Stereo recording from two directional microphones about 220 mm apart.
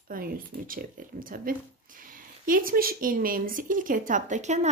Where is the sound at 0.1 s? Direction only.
40° right (ahead or behind).